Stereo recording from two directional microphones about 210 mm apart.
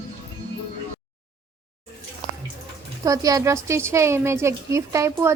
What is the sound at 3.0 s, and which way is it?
A woman's voice, 15° right (ahead or behind).